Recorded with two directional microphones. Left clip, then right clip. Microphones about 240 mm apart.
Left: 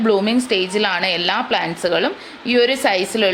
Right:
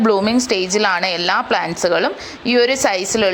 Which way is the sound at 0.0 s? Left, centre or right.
Centre.